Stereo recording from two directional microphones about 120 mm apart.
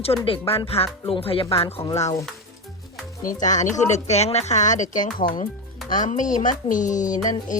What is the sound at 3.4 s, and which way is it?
Speech, 90° left.